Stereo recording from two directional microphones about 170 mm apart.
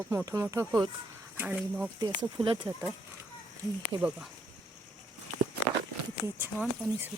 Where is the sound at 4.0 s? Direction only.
5° right (ahead or behind).